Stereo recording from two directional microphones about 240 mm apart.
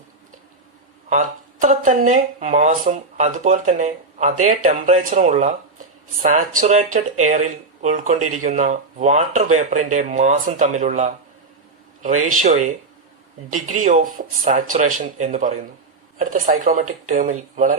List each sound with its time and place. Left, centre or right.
1.1 s speech: right
13.7 s speech: right